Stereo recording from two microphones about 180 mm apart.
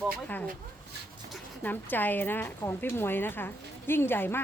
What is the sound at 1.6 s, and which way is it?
A woman's voice, 10° left (ahead or behind).